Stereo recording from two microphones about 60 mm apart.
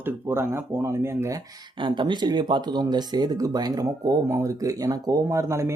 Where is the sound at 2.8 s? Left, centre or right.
Right.